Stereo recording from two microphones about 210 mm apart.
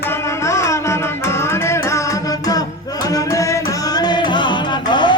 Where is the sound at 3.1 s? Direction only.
15° left (ahead or behind).